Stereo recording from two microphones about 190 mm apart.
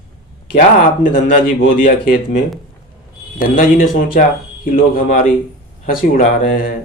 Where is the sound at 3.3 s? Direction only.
45° left (ahead or behind).